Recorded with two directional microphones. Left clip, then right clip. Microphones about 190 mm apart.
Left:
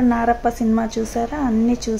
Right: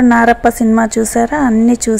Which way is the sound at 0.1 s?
25° right (ahead or behind).